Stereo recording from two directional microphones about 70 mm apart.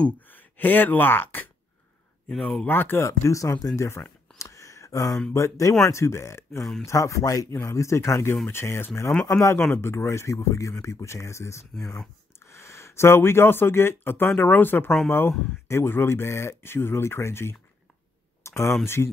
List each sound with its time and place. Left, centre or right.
0.2 s speech: left
2.2 s speech: centre
2.6 s speech: left
3.1 s speech: left
4.4 s a sound: left
5.3 s speech: left
18.4 s a sound: left